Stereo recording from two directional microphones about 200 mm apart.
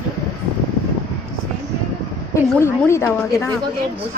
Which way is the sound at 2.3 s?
10° left (ahead or behind).